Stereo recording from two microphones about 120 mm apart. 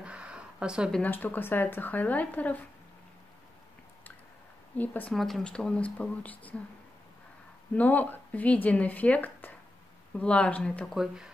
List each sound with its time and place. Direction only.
0.0 s a sound: 10° right (ahead or behind)
0.9 s speech: 15° left (ahead or behind)
4.7 s speech: 15° left (ahead or behind)
5.1 s speech: centre (ahead or behind)
7.7 s speech: 15° left (ahead or behind)